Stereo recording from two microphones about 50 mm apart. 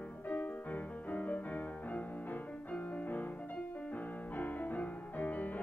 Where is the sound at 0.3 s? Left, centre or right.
Left.